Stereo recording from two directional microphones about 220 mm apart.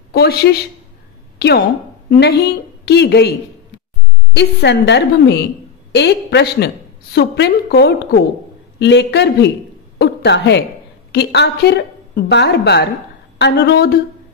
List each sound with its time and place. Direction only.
0.1 s a woman's voice: 45° left (ahead or behind)
4.4 s a woman's voice: 50° left (ahead or behind)
9.9 s a sound: 50° left (ahead or behind)
11.1 s a woman's voice: 50° left (ahead or behind)